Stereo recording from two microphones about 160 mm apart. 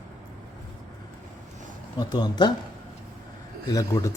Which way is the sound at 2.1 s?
25° left (ahead or behind).